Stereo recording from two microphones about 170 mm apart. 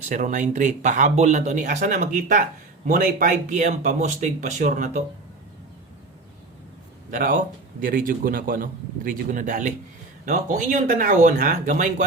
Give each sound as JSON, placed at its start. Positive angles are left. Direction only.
{"t": 0.0, "sound": "speech", "side_deg": -45}
{"t": 7.1, "sound": "a man's voice", "side_deg": -55}